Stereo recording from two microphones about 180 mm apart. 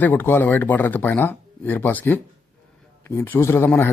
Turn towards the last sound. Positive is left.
turn(degrees=10)  # may be behind; listen again after turning